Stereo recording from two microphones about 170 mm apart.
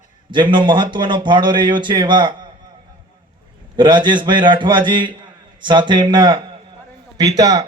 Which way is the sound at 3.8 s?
25° right (ahead or behind).